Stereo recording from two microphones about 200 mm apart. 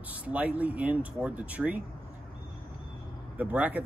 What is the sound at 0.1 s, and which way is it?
Speech, 5° right (ahead or behind).